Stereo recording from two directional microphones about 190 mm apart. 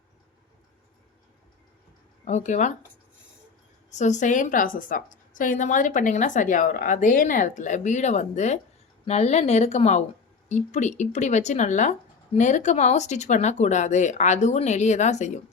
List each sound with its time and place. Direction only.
2.2 s speech: 40° left (ahead or behind)
3.9 s speech: 40° left (ahead or behind)